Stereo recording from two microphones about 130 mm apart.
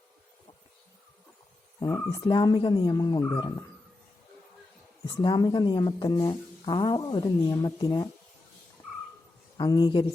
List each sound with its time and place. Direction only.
1.8 s speech: 30° left (ahead or behind)
5.0 s speech: 30° left (ahead or behind)
9.6 s speech: 30° left (ahead or behind)